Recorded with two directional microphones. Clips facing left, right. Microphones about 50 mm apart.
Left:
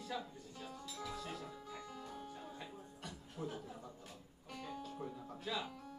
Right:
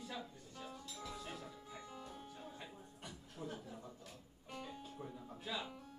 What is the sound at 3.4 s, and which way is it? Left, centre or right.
Speech, centre.